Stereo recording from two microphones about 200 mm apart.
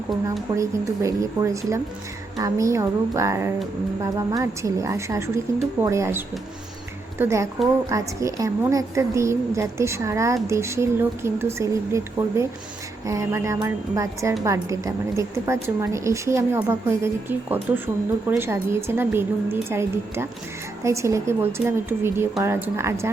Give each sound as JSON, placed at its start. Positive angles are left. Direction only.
{"t": 0.5, "sound": "a woman's voice", "side_deg": -15}